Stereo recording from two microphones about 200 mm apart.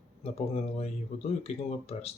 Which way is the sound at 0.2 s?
30° left (ahead or behind).